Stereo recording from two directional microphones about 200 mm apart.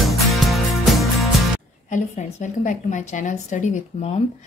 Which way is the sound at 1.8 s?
40° left (ahead or behind).